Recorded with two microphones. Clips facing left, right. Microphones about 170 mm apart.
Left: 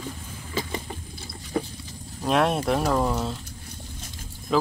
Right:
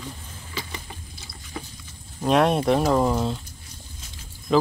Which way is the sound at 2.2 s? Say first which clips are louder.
Right 3 dB; centre (ahead or behind).